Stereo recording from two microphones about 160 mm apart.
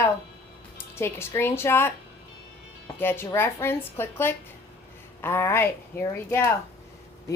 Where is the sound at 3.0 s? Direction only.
15° left (ahead or behind).